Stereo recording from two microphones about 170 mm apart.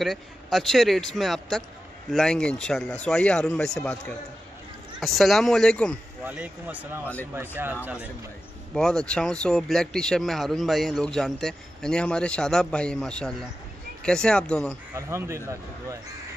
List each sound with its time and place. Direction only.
0.0 s a man's voice: centre (ahead or behind)
6.2 s speech: 10° right (ahead or behind)
8.7 s a man's voice: 5° left (ahead or behind)
15.0 s speech: 15° right (ahead or behind)